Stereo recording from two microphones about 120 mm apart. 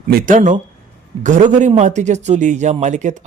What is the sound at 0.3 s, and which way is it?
A man's voice, 90° right.